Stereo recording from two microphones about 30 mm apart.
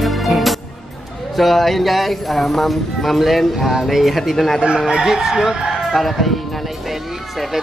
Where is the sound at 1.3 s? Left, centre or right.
Centre.